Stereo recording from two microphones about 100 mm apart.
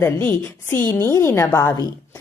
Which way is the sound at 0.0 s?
25° left (ahead or behind).